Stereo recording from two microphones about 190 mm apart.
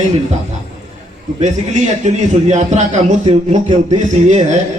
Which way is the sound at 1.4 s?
40° right (ahead or behind).